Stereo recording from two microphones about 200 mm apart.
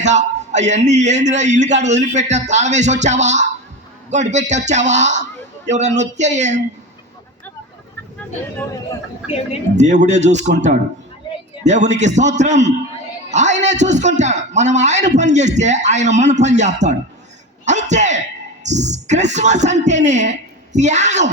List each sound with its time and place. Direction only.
0.0 s a man's voice: 35° right (ahead or behind)
9.7 s a man's voice: 35° right (ahead or behind)